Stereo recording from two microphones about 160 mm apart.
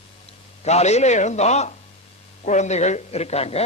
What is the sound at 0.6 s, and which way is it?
A man's voice, 45° left (ahead or behind).